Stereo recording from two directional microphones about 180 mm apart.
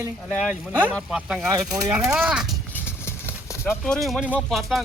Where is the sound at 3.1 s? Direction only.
15° left (ahead or behind).